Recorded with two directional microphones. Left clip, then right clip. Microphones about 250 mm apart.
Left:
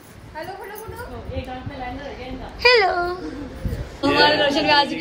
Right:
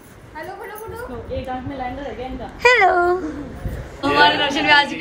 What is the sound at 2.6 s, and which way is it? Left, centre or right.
Speech, centre.